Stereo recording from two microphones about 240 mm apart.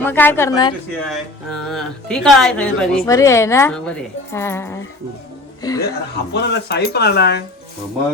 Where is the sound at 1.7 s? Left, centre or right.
Centre.